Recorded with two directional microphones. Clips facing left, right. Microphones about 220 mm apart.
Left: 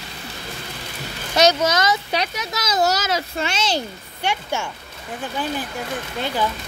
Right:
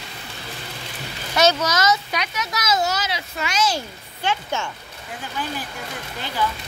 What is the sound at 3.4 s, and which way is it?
Speech, 30° left (ahead or behind).